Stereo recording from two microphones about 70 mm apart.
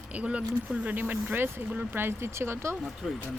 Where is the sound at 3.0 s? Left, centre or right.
Centre.